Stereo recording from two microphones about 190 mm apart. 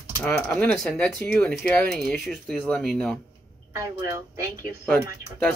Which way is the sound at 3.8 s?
15° right (ahead or behind).